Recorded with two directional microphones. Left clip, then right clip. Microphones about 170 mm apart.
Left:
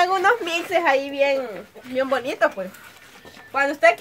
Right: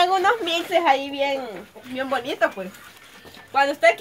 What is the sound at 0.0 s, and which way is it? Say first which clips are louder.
A woman's voice: even; 15° left (ahead or behind).